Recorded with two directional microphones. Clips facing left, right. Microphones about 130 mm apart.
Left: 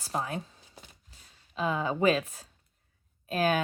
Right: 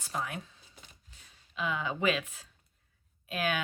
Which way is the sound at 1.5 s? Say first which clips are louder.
Left 5 dB; 35° left (ahead or behind).